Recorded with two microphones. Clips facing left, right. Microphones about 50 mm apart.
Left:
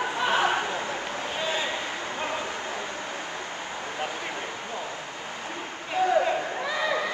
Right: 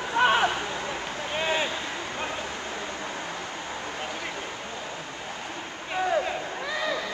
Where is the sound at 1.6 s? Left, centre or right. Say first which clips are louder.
Left 1 dB; left.